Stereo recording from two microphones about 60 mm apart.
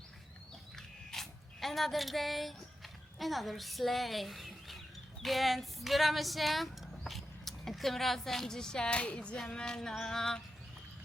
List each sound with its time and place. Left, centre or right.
0.8 s a sound: centre
5.2 s speech: centre
9.9 s music: centre